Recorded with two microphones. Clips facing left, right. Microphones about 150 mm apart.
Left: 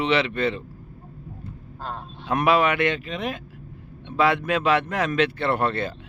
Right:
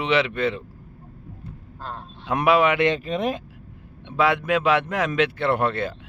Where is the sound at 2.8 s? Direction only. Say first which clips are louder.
Right 3 dB; 35° right (ahead or behind).